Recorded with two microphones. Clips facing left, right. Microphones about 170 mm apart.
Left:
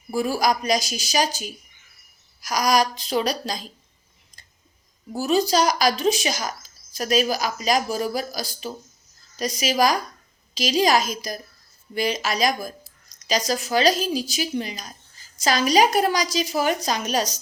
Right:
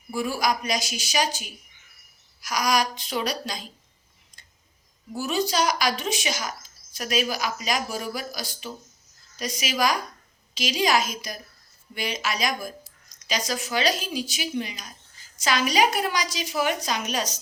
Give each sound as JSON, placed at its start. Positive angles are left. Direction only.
{"t": 0.1, "sound": "a woman's voice", "side_deg": 40}
{"t": 5.1, "sound": "a woman's voice", "side_deg": 35}